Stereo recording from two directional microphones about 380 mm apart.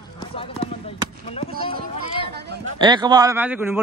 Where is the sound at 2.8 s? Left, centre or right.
Centre.